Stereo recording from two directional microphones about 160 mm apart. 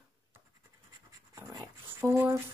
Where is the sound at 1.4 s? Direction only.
20° right (ahead or behind).